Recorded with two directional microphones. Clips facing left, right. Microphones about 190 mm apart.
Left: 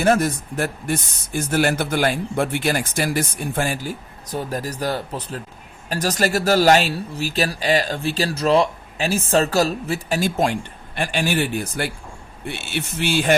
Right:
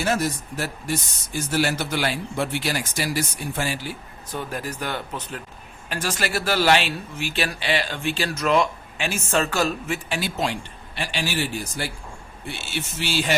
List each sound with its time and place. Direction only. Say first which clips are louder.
0.0 s speech: left 6 dB; 55° left (ahead or behind)